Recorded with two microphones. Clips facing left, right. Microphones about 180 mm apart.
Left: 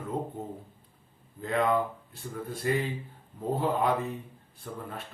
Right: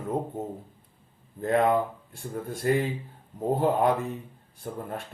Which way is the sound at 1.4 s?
50° right (ahead or behind).